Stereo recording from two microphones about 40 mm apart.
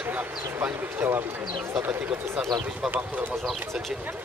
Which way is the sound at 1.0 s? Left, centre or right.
Right.